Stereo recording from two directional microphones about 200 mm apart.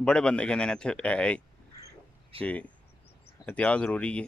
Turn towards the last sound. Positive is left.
turn(degrees=5)  # may be behind; listen again after turning